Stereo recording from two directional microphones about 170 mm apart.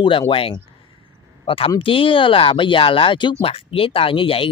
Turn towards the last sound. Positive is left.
turn(degrees=30)  # may be behind; listen again after turning